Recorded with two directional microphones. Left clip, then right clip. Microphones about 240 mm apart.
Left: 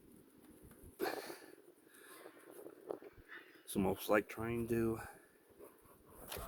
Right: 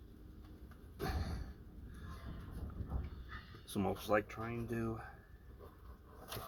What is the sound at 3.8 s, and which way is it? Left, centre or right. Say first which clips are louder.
Speech: left 1 dB; left.